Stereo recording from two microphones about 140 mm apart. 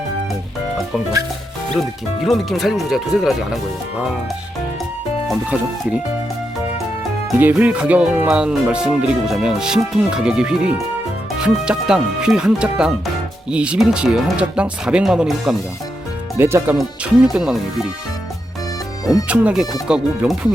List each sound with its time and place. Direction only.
2.2 s speech: centre (ahead or behind)
5.3 s speech: 5° right (ahead or behind)
7.3 s speech: 10° right (ahead or behind)
16.4 s speech: 15° right (ahead or behind)
16.7 s speech: 5° right (ahead or behind)
19.3 s speech: 10° right (ahead or behind)